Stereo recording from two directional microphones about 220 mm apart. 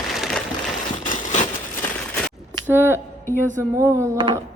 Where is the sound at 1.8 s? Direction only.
5° left (ahead or behind).